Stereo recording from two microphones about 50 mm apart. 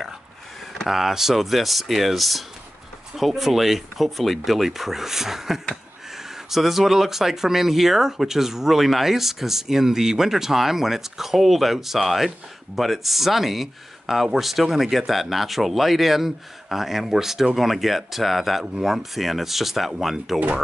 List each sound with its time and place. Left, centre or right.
0.7 s speech: centre
20.3 s speech: right